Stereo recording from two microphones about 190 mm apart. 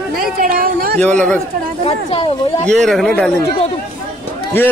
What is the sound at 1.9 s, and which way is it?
Speech, 30° left (ahead or behind).